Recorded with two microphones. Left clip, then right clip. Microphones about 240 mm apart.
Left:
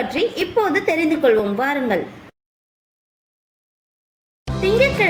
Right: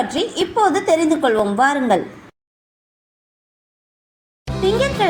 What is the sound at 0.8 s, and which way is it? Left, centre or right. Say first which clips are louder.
A woman's voice: right 1 dB; centre.